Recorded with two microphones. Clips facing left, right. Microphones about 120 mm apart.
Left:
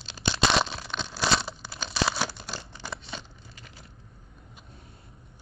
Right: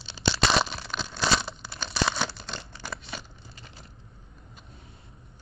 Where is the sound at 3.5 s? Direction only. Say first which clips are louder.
Right 1 dB; 30° right (ahead or behind).